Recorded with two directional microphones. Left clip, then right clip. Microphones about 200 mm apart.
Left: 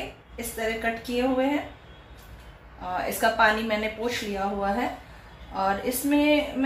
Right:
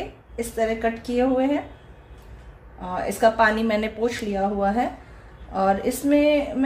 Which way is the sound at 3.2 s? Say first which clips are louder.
Right 3 dB; 65° right (ahead or behind).